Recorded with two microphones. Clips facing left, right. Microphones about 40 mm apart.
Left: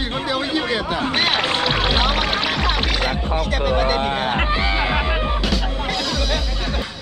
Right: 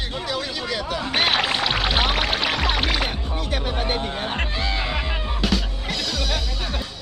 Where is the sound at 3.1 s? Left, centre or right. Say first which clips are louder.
Left 6 dB; left.